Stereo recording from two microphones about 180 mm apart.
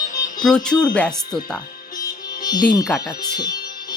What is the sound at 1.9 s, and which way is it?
Music, 20° left (ahead or behind).